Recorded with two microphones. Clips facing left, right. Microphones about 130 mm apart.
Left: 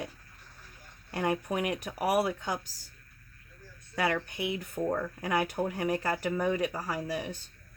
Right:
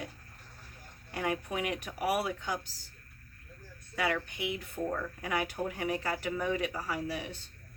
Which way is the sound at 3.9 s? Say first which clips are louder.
Left 2 dB; 40° left (ahead or behind).